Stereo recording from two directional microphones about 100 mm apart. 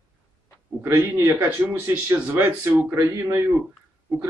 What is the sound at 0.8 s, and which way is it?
Speech, 30° right (ahead or behind).